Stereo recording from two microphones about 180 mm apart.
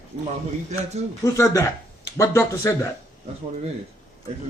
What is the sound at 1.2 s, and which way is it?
Speech, 20° left (ahead or behind).